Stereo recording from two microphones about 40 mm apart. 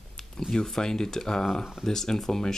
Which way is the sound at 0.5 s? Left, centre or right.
Centre.